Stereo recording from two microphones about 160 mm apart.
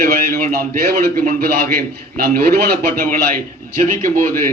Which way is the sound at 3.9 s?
55° right (ahead or behind).